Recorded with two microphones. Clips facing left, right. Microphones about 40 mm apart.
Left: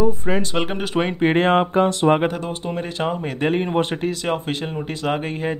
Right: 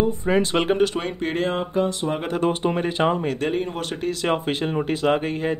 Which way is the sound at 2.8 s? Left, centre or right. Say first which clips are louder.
Right 1 dB; centre.